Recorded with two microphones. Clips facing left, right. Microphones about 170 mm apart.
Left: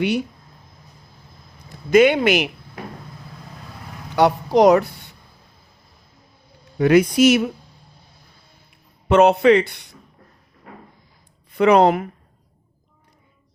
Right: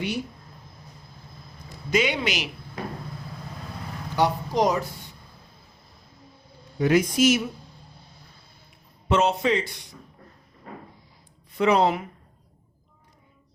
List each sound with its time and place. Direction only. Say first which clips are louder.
1.9 s speech: left 10 dB; 55° left (ahead or behind)
4.2 s speech: left 8 dB; 70° left (ahead or behind)
6.7 s speech: left 6 dB; 70° left (ahead or behind)
9.0 s speech: left 9 dB; 60° left (ahead or behind)
11.5 s speech: left 6 dB; 60° left (ahead or behind)